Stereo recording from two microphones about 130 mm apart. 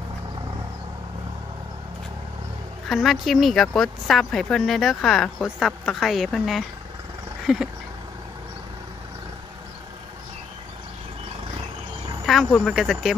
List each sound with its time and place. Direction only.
2.9 s a woman's voice: centre (ahead or behind)
7.4 s a sound: 5° right (ahead or behind)
12.3 s a woman's voice: centre (ahead or behind)